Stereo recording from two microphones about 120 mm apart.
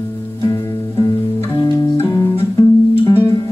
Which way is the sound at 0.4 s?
30° left (ahead or behind).